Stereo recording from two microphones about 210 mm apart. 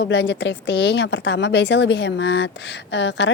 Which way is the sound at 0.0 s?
55° left (ahead or behind).